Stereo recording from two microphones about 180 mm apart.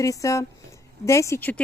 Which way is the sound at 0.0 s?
20° left (ahead or behind).